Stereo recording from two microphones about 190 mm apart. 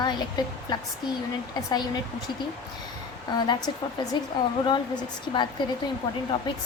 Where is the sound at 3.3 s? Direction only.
20° left (ahead or behind).